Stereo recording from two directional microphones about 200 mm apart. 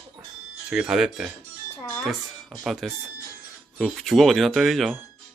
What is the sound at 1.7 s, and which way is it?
Music, 5° left (ahead or behind).